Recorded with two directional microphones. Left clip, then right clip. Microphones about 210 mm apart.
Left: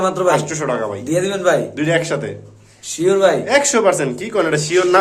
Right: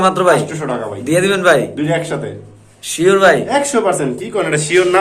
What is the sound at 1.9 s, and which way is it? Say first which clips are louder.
Speech: left 1 dB; 55° left (ahead or behind).